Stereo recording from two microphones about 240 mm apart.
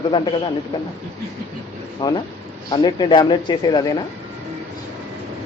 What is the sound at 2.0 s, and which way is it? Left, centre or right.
Speech, centre.